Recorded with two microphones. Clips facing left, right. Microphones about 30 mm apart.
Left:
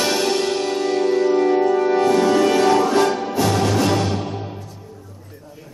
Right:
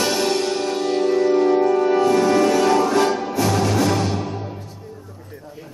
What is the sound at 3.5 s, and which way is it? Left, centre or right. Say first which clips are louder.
Music: even; left.